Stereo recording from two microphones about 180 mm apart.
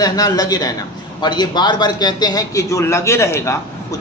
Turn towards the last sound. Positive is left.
turn(degrees=15)  # may be behind; listen again after turning